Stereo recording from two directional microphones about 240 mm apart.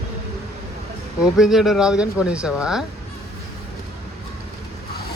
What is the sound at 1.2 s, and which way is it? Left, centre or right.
Speech, centre.